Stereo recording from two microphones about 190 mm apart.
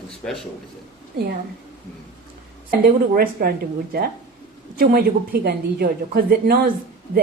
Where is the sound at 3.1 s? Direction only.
50° right (ahead or behind).